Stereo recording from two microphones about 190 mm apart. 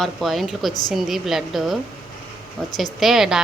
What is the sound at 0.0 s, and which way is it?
Speech, centre (ahead or behind).